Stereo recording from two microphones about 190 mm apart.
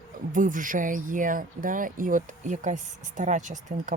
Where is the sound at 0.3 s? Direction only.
45° right (ahead or behind).